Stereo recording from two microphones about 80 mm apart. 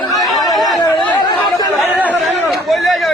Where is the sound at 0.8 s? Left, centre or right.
Left.